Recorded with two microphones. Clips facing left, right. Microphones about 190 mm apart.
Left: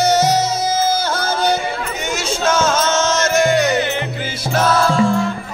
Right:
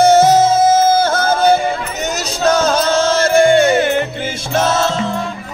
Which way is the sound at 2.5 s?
35° right (ahead or behind).